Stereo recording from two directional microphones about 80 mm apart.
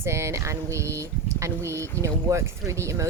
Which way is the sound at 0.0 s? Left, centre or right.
Right.